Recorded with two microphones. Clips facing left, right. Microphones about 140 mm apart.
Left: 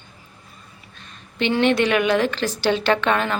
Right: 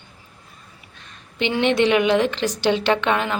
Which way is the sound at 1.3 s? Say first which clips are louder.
Left 1 dB; 15° right (ahead or behind).